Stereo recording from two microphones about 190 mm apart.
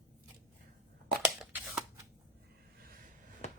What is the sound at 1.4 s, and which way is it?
Shuffling cards, 5° right (ahead or behind).